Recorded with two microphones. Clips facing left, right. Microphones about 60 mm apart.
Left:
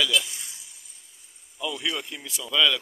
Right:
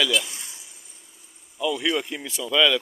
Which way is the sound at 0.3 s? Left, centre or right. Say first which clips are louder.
Right 1 dB; right.